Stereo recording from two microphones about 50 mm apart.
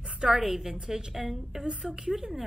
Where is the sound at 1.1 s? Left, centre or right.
Centre.